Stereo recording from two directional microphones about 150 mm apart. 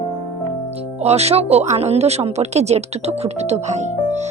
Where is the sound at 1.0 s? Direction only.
45° right (ahead or behind).